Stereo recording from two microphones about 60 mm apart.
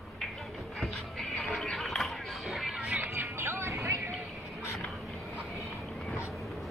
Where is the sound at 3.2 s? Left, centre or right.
Right.